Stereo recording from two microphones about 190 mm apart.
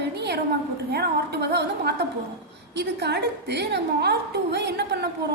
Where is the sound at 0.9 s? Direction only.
60° right (ahead or behind).